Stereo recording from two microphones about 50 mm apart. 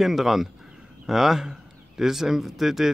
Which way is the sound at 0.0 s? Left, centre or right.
Centre.